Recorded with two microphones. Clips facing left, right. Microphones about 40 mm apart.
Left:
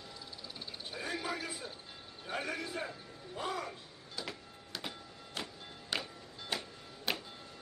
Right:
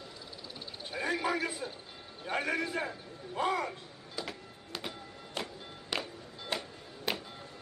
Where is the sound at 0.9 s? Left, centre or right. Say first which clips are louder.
Right 7 dB; centre.